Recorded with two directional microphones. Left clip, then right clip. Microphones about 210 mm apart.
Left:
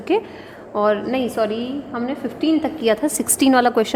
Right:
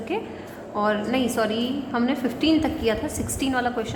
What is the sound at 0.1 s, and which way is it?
Speech, 50° left (ahead or behind).